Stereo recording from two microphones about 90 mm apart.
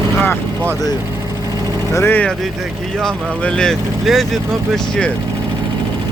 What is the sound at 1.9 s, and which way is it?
Speech, 25° left (ahead or behind).